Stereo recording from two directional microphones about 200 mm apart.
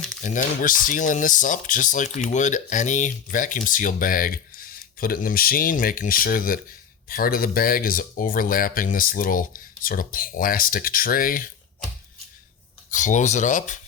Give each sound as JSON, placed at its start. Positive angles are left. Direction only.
{"t": 0.2, "sound": "speech", "side_deg": 40}
{"t": 12.9, "sound": "speech", "side_deg": 40}